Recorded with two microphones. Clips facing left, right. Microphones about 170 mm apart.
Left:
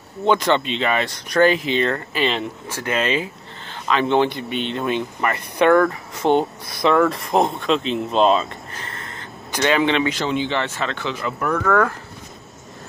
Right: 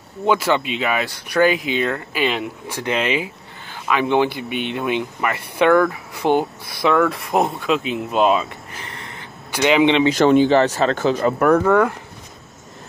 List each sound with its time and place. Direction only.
0.2 s speech: 10° right (ahead or behind)
10.1 s speech: 45° right (ahead or behind)
11.3 s speech: 60° right (ahead or behind)
11.6 s speech: 15° right (ahead or behind)